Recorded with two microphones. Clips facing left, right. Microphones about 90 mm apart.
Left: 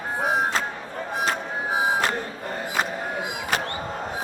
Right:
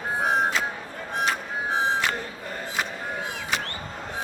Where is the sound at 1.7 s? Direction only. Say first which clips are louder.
Left 1 dB; 10° left (ahead or behind).